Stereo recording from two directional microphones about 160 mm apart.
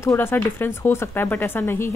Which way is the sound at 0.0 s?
15° left (ahead or behind).